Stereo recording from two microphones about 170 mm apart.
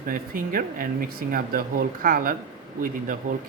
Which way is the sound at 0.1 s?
55° right (ahead or behind).